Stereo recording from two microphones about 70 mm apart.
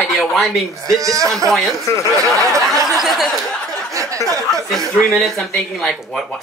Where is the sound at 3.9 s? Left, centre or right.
Right.